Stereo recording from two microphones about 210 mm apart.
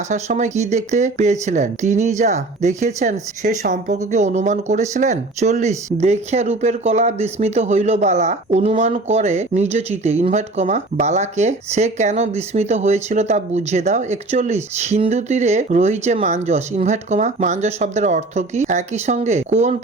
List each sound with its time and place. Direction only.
0.1 s speech: 35° right (ahead or behind)